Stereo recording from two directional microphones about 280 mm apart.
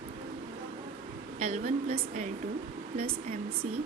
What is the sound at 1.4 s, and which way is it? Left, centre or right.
Speech, right.